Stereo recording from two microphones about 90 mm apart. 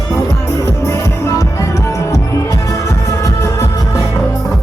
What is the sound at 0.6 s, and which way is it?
Music, 30° left (ahead or behind).